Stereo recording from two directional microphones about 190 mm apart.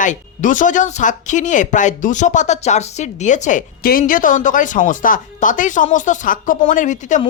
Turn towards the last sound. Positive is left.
turn(degrees=40)  # may be behind; listen again after turning